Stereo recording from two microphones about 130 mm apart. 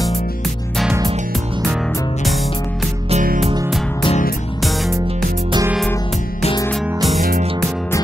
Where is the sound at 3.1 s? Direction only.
65° right (ahead or behind).